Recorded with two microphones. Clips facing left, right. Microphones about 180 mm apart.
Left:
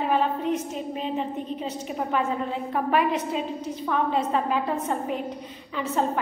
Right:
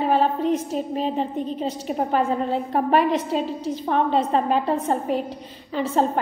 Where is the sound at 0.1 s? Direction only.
35° right (ahead or behind).